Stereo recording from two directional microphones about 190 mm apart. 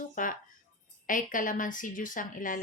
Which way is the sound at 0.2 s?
45° left (ahead or behind).